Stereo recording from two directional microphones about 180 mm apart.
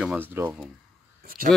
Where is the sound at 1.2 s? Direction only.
55° right (ahead or behind).